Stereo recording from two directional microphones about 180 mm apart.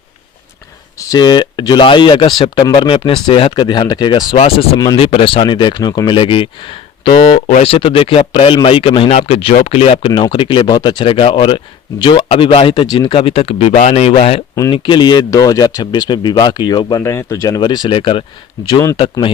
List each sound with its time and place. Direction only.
0.9 s speech: 20° left (ahead or behind)